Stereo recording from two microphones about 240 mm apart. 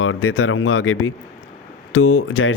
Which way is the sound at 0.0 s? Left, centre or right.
Left.